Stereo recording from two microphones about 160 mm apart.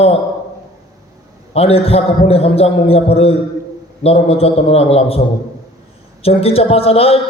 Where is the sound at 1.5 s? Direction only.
40° left (ahead or behind).